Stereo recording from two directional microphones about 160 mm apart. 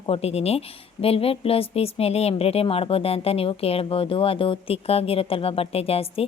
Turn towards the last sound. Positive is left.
turn(degrees=40)  # may be behind; listen again after turning